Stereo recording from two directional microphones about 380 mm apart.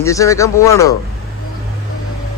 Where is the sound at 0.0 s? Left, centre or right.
Centre.